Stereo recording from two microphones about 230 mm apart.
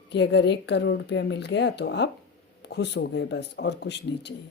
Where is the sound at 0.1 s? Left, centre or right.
Left.